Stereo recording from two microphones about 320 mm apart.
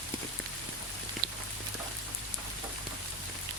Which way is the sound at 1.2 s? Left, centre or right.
Right.